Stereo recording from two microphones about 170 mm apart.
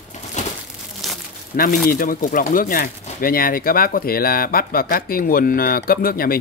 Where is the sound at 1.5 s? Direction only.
55° left (ahead or behind).